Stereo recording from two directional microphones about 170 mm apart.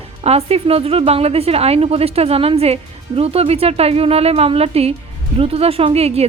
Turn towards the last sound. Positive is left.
turn(degrees=-35)  # may be behind; listen again after turning